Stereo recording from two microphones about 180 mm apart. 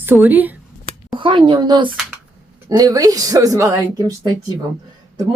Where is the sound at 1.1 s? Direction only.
30° right (ahead or behind).